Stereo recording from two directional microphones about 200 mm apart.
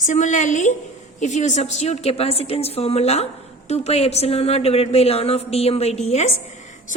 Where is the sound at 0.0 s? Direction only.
35° left (ahead or behind).